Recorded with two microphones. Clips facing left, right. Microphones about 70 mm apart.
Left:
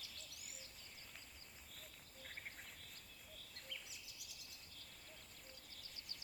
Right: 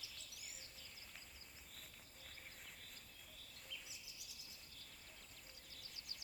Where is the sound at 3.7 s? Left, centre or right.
Left.